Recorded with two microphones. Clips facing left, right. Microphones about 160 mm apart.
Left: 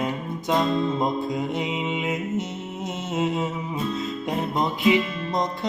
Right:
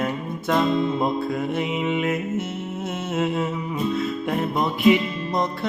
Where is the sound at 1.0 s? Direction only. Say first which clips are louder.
Right 1 dB; 15° left (ahead or behind).